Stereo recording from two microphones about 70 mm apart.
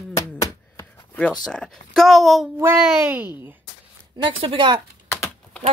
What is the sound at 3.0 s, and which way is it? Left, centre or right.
Speech, right.